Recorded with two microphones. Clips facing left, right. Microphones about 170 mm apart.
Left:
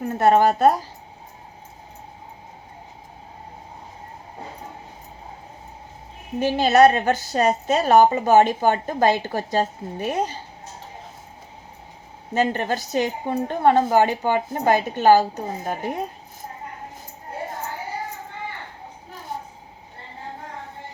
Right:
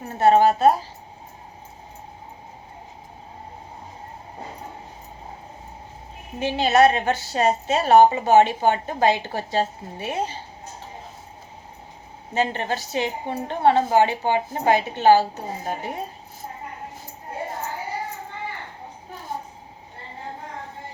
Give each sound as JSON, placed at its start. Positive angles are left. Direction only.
{"t": 0.0, "sound": "a woman's voice", "side_deg": 50}
{"t": 6.4, "sound": "a woman's voice", "side_deg": 40}
{"t": 12.3, "sound": "a woman's voice", "side_deg": 45}